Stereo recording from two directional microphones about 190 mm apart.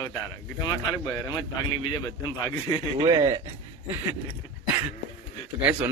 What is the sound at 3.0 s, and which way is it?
Speech, 25° right (ahead or behind).